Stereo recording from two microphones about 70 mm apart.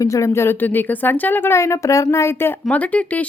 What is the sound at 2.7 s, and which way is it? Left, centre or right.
Speech, left.